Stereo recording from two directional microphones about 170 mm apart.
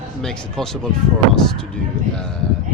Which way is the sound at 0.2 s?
5° left (ahead or behind).